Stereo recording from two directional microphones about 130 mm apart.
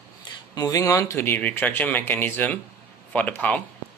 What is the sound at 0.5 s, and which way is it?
Speech, 30° left (ahead or behind).